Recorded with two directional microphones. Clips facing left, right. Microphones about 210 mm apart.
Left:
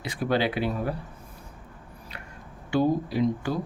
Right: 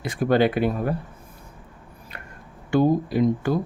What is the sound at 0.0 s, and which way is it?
Speech, 50° right (ahead or behind).